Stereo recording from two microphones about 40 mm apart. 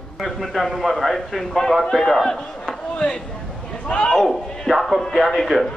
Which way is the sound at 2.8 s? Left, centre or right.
Left.